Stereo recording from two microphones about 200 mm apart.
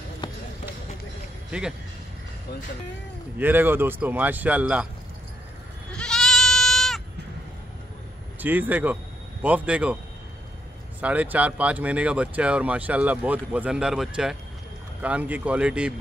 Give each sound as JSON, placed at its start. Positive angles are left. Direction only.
{"t": 0.2, "sound": "run", "side_deg": 25}
{"t": 3.3, "sound": "speech", "side_deg": -10}
{"t": 5.9, "sound": "goat", "side_deg": 5}
{"t": 8.4, "sound": "speech", "side_deg": -10}
{"t": 11.0, "sound": "speech", "side_deg": -5}